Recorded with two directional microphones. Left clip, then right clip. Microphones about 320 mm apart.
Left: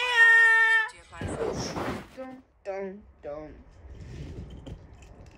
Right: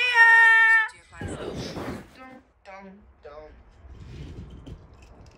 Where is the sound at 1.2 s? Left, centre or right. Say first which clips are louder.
Left 3 dB; centre.